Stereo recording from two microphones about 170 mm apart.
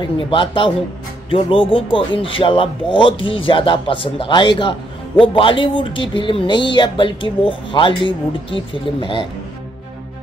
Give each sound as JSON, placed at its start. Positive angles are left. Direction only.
{"t": 0.0, "sound": "speech", "side_deg": 30}